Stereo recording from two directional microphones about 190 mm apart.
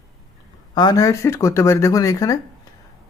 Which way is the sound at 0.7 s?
20° left (ahead or behind).